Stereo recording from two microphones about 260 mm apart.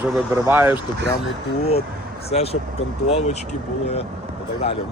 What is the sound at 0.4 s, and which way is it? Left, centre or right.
Speech, centre.